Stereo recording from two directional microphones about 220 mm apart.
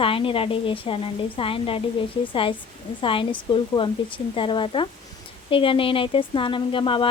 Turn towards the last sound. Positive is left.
turn(degrees=25)  # may be behind; listen again after turning